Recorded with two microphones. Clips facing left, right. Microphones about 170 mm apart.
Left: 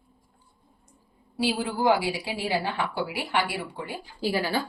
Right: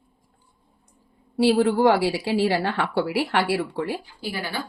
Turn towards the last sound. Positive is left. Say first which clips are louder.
# left 4 dB
turn(degrees=35)  # may be behind; listen again after turning